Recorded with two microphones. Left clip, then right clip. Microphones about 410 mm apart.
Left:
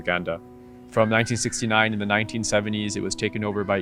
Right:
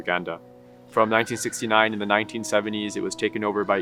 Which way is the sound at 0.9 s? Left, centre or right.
Left.